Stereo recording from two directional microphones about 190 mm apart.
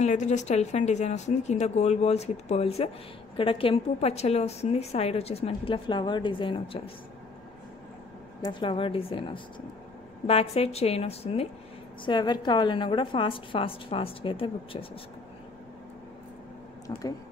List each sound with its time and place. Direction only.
0.0 s a woman's voice: 40° left (ahead or behind)
8.4 s a woman's voice: 25° left (ahead or behind)